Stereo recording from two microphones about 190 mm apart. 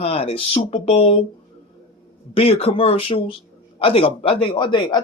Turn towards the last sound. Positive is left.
turn(degrees=25)  # may be behind; listen again after turning